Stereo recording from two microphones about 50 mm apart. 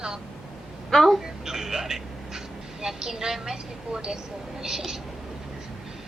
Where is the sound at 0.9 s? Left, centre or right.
Centre.